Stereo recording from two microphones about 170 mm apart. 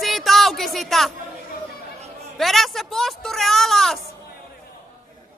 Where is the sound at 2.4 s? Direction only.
Centre (ahead or behind).